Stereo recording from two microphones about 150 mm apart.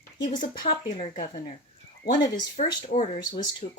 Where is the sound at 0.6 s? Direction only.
60° left (ahead or behind).